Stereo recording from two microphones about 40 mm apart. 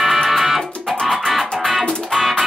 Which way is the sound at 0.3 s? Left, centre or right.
Centre.